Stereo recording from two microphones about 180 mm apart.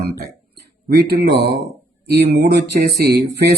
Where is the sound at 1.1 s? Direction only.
60° right (ahead or behind).